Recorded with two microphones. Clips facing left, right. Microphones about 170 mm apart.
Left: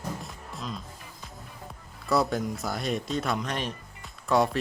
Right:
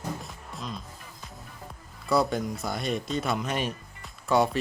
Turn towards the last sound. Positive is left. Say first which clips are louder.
# even
turn(degrees=0)  # may be behind; listen again after turning